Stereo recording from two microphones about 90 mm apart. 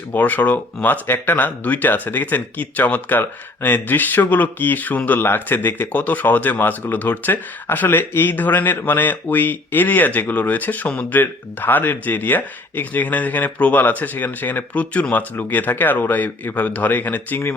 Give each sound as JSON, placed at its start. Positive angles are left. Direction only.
{"t": 0.1, "sound": "speech", "side_deg": 20}